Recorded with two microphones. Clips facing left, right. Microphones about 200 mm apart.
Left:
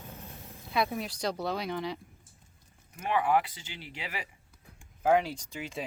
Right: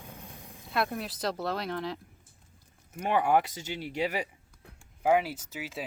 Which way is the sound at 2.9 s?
45° right (ahead or behind).